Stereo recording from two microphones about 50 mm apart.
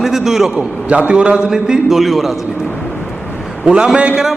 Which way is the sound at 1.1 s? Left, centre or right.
Right.